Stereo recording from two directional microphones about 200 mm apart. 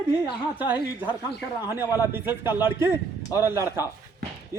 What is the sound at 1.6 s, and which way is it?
A man's voice, 10° right (ahead or behind).